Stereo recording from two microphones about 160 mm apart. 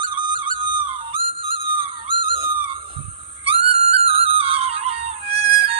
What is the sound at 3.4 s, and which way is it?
Music, 35° right (ahead or behind).